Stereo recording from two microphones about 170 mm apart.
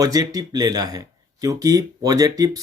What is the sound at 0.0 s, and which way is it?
Speech, 20° right (ahead or behind).